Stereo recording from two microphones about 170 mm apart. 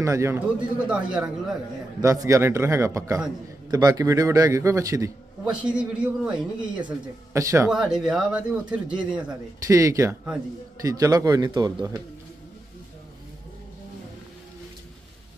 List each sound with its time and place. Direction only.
0.0 s speech: 15° right (ahead or behind)
2.0 s a man's voice: 20° right (ahead or behind)
5.7 s speech: 5° right (ahead or behind)
7.7 s speech: 5° right (ahead or behind)
9.7 s a man's voice: 20° right (ahead or behind)